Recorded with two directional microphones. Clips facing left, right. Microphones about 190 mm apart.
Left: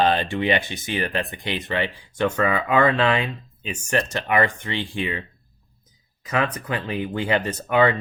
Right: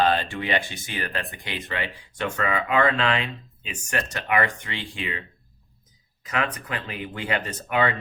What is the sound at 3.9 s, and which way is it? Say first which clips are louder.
Speech: left 4 dB; 30° left (ahead or behind).